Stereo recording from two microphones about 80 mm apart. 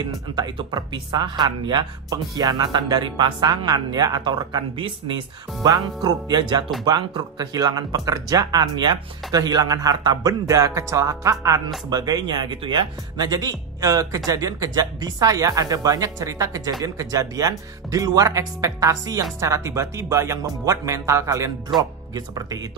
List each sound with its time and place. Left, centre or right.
0.4 s speech: right
2.0 s speech: right
5.6 s speech: right
11.9 s speech: right
22.1 s speech: right